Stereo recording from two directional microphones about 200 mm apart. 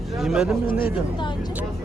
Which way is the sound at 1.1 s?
25° left (ahead or behind).